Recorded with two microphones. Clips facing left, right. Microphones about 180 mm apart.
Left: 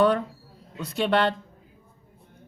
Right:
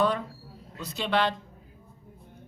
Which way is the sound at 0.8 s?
60° left (ahead or behind).